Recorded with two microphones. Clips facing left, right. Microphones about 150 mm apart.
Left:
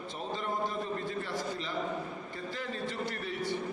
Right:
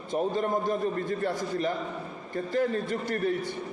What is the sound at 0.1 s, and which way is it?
A man's voice, 50° right (ahead or behind).